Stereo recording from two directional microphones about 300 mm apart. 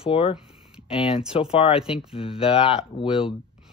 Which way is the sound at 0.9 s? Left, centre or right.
Centre.